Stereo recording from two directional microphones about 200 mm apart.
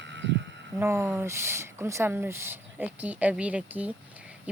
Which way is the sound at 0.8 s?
10° right (ahead or behind).